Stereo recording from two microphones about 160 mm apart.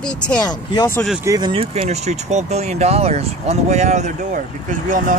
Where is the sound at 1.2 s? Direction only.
25° right (ahead or behind).